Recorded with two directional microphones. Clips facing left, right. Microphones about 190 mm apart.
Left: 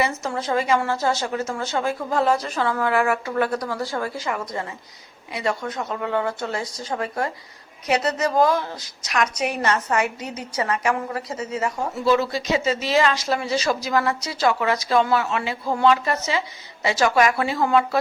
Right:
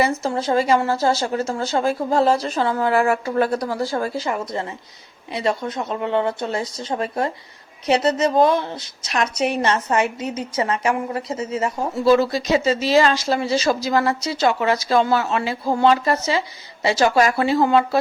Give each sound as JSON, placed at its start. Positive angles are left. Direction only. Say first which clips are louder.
{"t": 0.0, "sound": "a woman's voice", "louder": "right 4 dB", "side_deg": -30}
{"t": 12.0, "sound": "a woman's voice", "louder": "right 4 dB", "side_deg": -35}